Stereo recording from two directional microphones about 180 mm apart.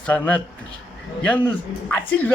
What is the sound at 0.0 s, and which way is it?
A woman's voice, 10° left (ahead or behind).